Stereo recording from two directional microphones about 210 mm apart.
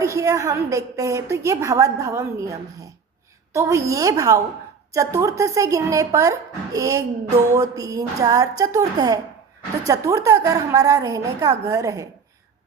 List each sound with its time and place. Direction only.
0.0 s a woman's voice: 15° right (ahead or behind)